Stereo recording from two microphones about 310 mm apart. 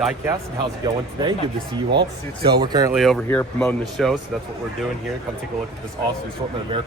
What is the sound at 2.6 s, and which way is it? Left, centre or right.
Speech, centre.